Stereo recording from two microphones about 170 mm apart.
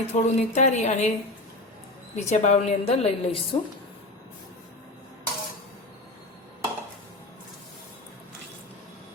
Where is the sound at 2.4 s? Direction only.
40° left (ahead or behind).